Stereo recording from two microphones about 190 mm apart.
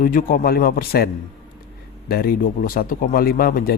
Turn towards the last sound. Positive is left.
turn(degrees=50)  # may be behind; listen again after turning